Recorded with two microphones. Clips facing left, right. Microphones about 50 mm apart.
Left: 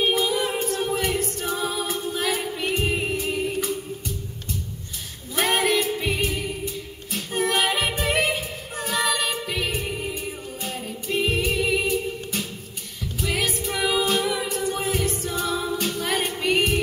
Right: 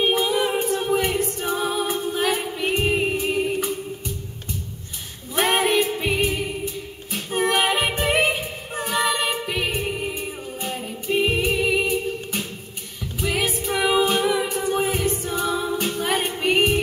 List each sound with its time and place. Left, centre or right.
0.0 s a capella: centre
5.3 s music: centre
13.7 s a capella: centre